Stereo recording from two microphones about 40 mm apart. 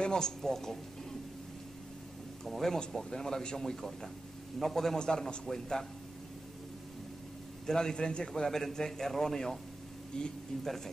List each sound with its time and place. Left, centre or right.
0.0 s a man's voice: centre
2.4 s a man's voice: centre
4.9 s a man's voice: centre
7.6 s a man's voice: centre